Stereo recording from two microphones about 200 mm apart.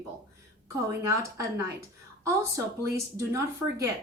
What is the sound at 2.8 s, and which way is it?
Speech, 15° right (ahead or behind).